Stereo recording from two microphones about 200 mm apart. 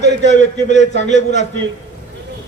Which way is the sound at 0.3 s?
35° left (ahead or behind).